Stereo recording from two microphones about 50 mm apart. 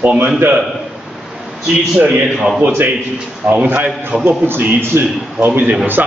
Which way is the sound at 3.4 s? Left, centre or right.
Right.